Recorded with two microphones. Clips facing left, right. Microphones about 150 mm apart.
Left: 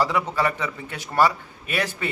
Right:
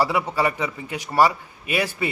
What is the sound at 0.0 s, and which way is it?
A man's voice, 10° right (ahead or behind).